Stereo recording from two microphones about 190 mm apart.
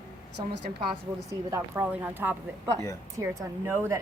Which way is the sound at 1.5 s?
10° right (ahead or behind).